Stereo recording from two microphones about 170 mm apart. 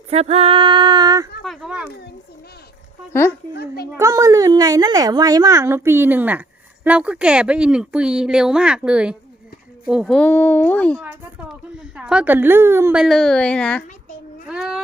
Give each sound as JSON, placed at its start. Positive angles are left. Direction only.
{"t": 0.1, "sound": "speech", "side_deg": -35}
{"t": 1.5, "sound": "a sound", "side_deg": -5}
{"t": 3.1, "sound": "speech", "side_deg": 15}
{"t": 3.5, "sound": "a child's voice", "side_deg": 70}
{"t": 3.9, "sound": "speech", "side_deg": -20}
{"t": 11.0, "sound": "a woman's voice", "side_deg": -5}
{"t": 13.0, "sound": "speech", "side_deg": 0}
{"t": 14.4, "sound": "child singing", "side_deg": -5}